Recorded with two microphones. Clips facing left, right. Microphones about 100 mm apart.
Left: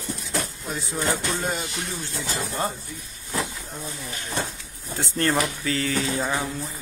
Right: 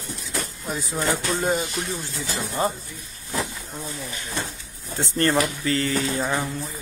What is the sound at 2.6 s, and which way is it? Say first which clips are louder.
Speech: right 5 dB; 15° right (ahead or behind).